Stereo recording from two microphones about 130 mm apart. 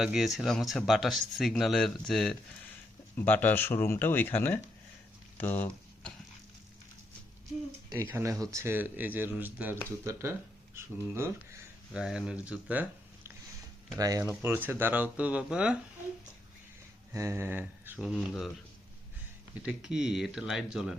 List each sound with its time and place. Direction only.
0.0 s speech: 5° right (ahead or behind)
3.2 s speech: 15° left (ahead or behind)
7.9 s speech: 15° right (ahead or behind)
11.9 s speech: 5° right (ahead or behind)
14.0 s speech: 30° right (ahead or behind)
14.4 s speech: 15° right (ahead or behind)
17.1 s speech: 20° right (ahead or behind)
18.0 s speech: 5° right (ahead or behind)
19.6 s speech: 5° right (ahead or behind)